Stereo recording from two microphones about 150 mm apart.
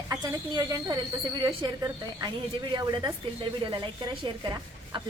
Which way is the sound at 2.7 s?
30° right (ahead or behind).